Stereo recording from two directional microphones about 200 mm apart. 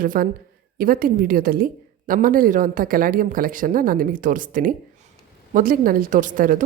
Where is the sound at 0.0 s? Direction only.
45° right (ahead or behind).